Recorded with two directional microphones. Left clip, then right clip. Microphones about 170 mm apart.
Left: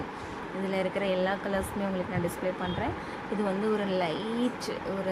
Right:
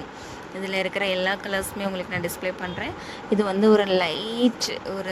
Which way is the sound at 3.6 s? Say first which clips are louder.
Right 12 dB; 65° right (ahead or behind).